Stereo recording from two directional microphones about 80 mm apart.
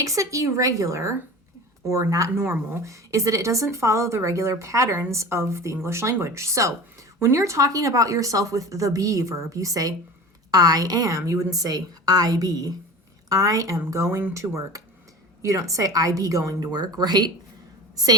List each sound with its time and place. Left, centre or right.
0.0 s a woman's voice: right
16.7 s speech: right